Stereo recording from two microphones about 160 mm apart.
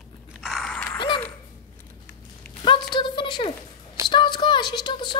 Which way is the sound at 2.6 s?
30° left (ahead or behind).